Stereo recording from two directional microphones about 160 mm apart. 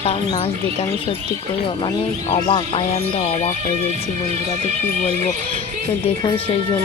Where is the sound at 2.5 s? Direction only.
35° left (ahead or behind).